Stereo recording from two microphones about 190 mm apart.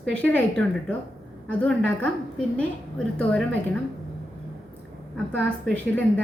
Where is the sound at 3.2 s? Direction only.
5° left (ahead or behind).